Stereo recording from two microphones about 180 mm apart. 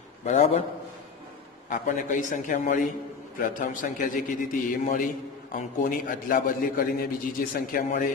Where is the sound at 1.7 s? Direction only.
45° left (ahead or behind).